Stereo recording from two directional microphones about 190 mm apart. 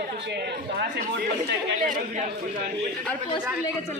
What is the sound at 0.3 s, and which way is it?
Speech, 60° right (ahead or behind).